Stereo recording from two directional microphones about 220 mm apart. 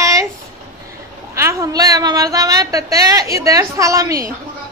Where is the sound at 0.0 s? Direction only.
15° right (ahead or behind).